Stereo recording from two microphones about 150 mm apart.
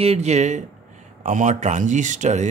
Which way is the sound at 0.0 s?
45° right (ahead or behind).